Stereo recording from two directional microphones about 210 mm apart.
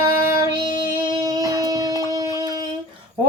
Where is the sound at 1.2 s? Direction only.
20° right (ahead or behind).